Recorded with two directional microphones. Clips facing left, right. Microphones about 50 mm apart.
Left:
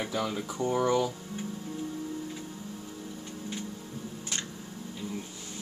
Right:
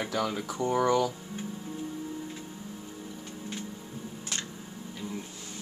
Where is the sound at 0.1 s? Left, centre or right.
Right.